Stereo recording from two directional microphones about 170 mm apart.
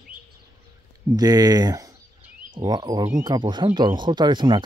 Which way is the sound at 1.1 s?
20° right (ahead or behind).